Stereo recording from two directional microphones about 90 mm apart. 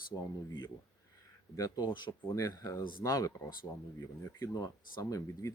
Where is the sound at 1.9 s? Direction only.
60° left (ahead or behind).